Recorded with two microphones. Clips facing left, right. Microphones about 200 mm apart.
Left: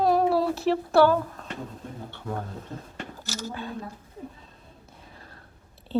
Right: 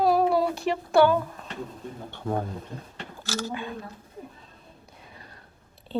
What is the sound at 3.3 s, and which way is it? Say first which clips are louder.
Speech: right 5 dB; 80° right.